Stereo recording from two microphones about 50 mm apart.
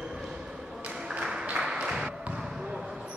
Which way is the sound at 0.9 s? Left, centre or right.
Centre.